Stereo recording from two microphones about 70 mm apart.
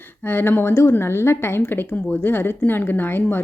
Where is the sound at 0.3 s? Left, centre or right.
Left.